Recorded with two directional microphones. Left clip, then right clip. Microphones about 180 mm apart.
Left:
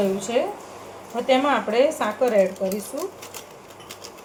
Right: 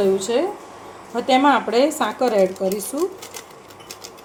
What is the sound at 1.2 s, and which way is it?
A woman's voice, 70° right (ahead or behind).